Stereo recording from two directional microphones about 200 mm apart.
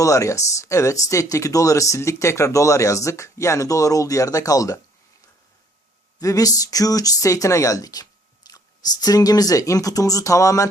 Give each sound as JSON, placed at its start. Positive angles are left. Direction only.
{"t": 0.0, "sound": "speech", "side_deg": 15}
{"t": 6.1, "sound": "speech", "side_deg": 15}